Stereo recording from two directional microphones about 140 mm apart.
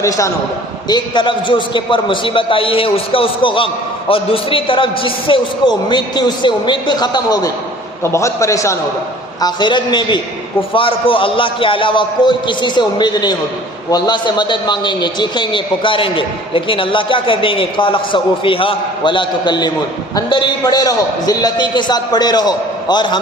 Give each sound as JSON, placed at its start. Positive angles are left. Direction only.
{"t": 0.9, "sound": "a man's voice", "side_deg": 35}
{"t": 9.4, "sound": "a man's voice", "side_deg": 35}